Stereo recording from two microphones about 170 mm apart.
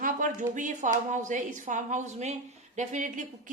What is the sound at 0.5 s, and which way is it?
A woman's voice, 45° right (ahead or behind).